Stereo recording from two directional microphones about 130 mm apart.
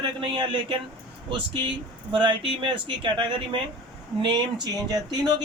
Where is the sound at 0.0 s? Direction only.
35° right (ahead or behind).